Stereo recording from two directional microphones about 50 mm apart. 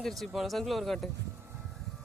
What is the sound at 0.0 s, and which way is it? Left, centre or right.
Speech, centre.